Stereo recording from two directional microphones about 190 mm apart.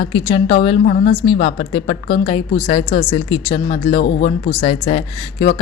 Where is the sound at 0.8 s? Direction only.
50° left (ahead or behind).